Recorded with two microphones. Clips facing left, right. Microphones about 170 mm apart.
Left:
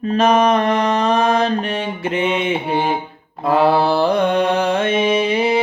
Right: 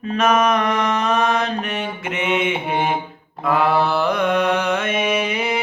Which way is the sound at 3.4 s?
30° left (ahead or behind).